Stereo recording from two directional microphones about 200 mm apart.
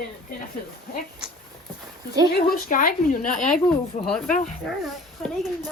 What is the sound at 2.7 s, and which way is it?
Speech, 45° left (ahead or behind).